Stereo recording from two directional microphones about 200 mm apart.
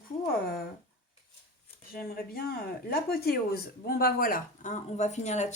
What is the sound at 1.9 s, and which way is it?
Speech, 50° left (ahead or behind).